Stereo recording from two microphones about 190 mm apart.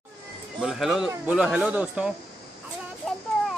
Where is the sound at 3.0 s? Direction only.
5° left (ahead or behind).